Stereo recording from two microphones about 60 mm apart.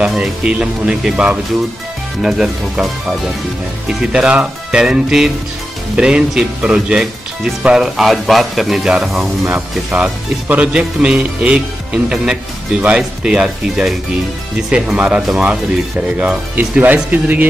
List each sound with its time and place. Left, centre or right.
0.2 s speech: centre
4.1 s speech: centre
8.8 s speech: centre
16.2 s speech: right